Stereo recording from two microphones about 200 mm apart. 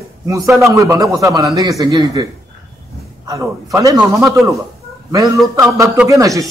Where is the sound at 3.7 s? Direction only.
15° right (ahead or behind).